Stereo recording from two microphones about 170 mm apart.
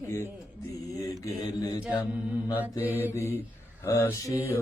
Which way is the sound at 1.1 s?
20° left (ahead or behind).